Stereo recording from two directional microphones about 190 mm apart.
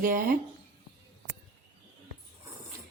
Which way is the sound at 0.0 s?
45° right (ahead or behind).